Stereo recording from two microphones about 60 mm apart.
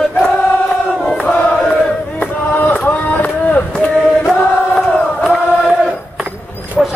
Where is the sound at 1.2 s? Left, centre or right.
Left.